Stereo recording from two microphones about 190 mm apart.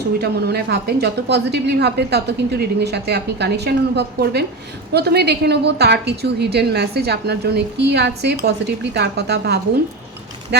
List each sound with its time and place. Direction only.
0.2 s a woman's voice: 60° right (ahead or behind)